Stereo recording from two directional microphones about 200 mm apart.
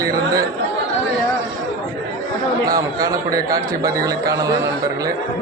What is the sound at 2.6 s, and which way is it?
A man's voice, 15° right (ahead or behind).